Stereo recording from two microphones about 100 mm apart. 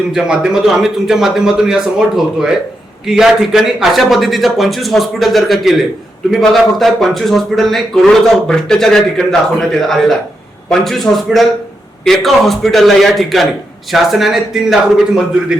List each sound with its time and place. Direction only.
0.1 s a man's voice: 5° right (ahead or behind)